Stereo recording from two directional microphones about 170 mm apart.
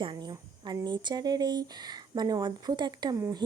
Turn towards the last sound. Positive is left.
turn(degrees=-20)  # may be behind; listen again after turning